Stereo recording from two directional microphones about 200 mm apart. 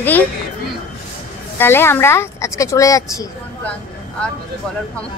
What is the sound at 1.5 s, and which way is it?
A woman's voice, 10° left (ahead or behind).